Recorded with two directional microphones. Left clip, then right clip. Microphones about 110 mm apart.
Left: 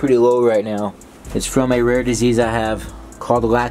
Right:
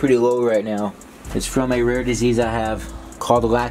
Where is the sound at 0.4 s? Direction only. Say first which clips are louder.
Left 3 dB; 10° left (ahead or behind).